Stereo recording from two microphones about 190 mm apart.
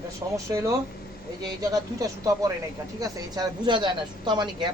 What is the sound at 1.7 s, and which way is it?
Speech, 15° right (ahead or behind).